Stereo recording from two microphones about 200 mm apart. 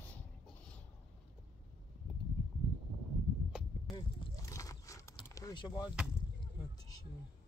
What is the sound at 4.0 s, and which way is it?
Vehicle, 20° left (ahead or behind).